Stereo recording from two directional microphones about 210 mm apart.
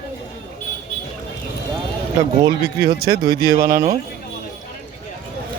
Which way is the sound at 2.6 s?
50° right (ahead or behind).